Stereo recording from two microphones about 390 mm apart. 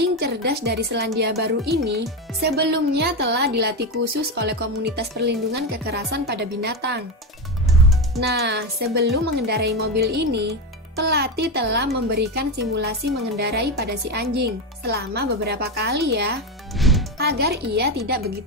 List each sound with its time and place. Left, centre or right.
0.2 s speech: right
8.2 s speech: right
16.8 s music: centre
17.2 s speech: right